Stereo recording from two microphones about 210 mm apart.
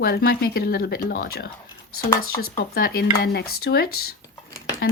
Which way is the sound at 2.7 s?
45° left (ahead or behind).